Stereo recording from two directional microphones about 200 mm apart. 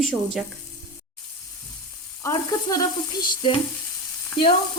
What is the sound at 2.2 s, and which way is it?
Frying, 20° left (ahead or behind).